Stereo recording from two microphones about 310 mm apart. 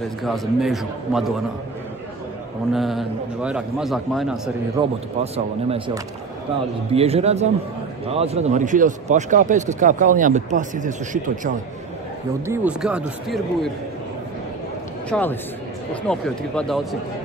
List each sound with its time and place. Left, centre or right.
0.2 s a man's voice: centre
2.7 s a man's voice: centre
4.7 s a man's voice: centre
6.9 s a man's voice: centre
12.4 s a man's voice: centre
15.0 s a man's voice: centre